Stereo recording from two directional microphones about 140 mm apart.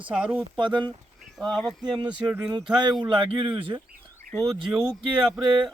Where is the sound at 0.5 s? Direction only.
35° right (ahead or behind).